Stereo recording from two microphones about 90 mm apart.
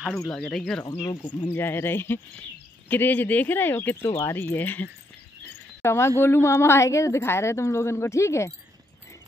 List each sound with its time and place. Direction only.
0.0 s speech: centre (ahead or behind)
1.5 s a woman's voice: 25° left (ahead or behind)